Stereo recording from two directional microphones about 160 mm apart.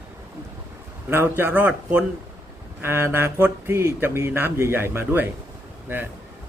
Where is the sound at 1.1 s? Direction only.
15° right (ahead or behind).